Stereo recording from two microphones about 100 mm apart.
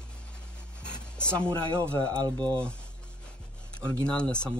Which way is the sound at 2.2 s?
45° right (ahead or behind).